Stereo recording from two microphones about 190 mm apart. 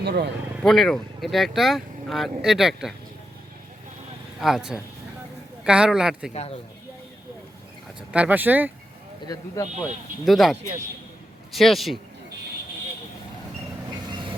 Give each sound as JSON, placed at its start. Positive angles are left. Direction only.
{"t": 0.0, "sound": "speech", "side_deg": -60}
{"t": 0.6, "sound": "speech", "side_deg": 0}
{"t": 4.4, "sound": "speech", "side_deg": 0}
{"t": 6.3, "sound": "speech", "side_deg": 35}
{"t": 8.1, "sound": "speech", "side_deg": -10}
{"t": 9.2, "sound": "speech", "side_deg": 20}
{"t": 10.2, "sound": "speech", "side_deg": 0}
{"t": 14.1, "sound": "vehicle", "side_deg": -25}